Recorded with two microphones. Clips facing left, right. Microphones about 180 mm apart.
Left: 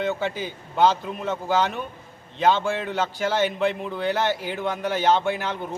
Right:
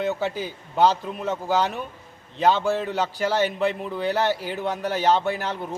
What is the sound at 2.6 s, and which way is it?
Speech, 5° right (ahead or behind).